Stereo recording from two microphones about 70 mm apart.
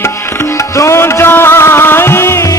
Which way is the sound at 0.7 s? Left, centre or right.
Left.